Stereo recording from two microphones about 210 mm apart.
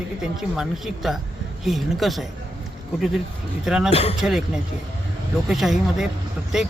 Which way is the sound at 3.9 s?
30° left (ahead or behind).